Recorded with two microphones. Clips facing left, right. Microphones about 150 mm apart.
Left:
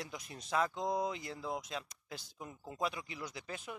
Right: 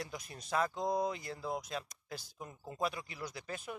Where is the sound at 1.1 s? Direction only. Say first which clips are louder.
Right 1 dB; 20° left (ahead or behind).